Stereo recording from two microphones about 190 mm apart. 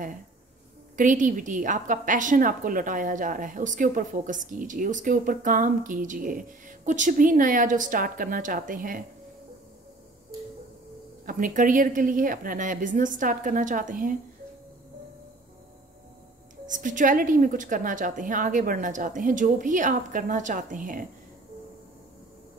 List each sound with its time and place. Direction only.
0.9 s a woman's voice: 45° right (ahead or behind)
11.2 s a woman's voice: 45° right (ahead or behind)
16.6 s a woman's voice: 40° right (ahead or behind)